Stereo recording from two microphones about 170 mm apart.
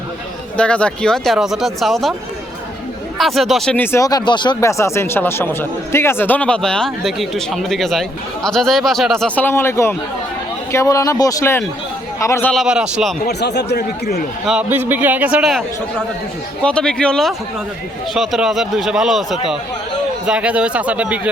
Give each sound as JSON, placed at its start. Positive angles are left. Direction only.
{"t": 0.5, "sound": "speech", "side_deg": 5}
{"t": 3.2, "sound": "speech", "side_deg": 0}
{"t": 3.9, "sound": "a man's voice", "side_deg": 20}
{"t": 12.5, "sound": "speech", "side_deg": -5}
{"t": 13.2, "sound": "speech", "side_deg": 80}
{"t": 14.4, "sound": "a man's voice", "side_deg": -5}
{"t": 16.6, "sound": "a man's voice", "side_deg": 5}